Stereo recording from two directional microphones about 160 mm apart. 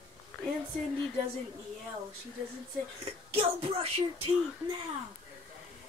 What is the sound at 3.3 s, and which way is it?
Speech, 40° right (ahead or behind).